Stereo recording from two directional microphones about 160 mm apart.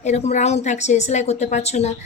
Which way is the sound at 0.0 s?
45° left (ahead or behind).